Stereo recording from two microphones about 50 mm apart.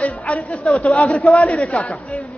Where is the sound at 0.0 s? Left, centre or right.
Left.